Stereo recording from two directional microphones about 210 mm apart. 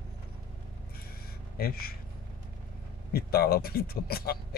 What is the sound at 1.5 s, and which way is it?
Speech, 45° left (ahead or behind).